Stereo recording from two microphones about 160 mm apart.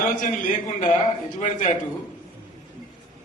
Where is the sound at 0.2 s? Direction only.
55° left (ahead or behind).